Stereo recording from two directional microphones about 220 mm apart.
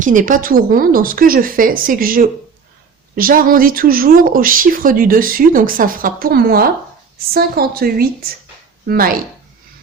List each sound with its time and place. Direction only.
0.0 s a woman's voice: 35° right (ahead or behind)